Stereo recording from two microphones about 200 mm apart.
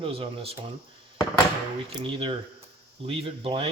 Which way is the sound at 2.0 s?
25° right (ahead or behind).